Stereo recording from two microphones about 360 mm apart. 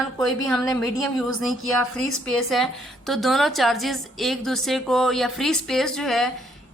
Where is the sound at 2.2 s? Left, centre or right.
Centre.